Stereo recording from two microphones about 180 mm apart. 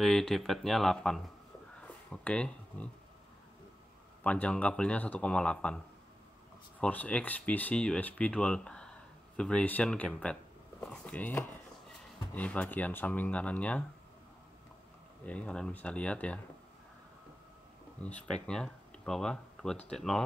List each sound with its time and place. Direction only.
0.0 s speech: centre (ahead or behind)
1.8 s a sound: 5° left (ahead or behind)
4.2 s speech: 5° left (ahead or behind)
6.8 s speech: 10° left (ahead or behind)
15.2 s speech: 5° left (ahead or behind)
18.0 s speech: 5° left (ahead or behind)